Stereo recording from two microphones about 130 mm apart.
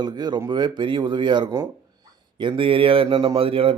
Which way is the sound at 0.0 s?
35° right (ahead or behind).